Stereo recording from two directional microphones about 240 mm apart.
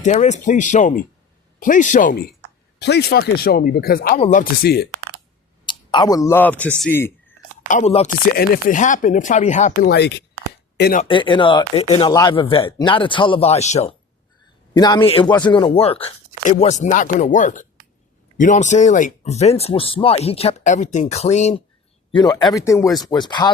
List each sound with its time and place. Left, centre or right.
0.0 s speech: left
5.6 s speech: centre
7.7 s speech: left
9.9 s speech: left
11.1 s speech: centre
14.7 s speech: centre
22.1 s speech: centre